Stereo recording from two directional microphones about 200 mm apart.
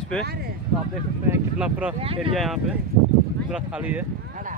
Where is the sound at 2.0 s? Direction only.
30° right (ahead or behind).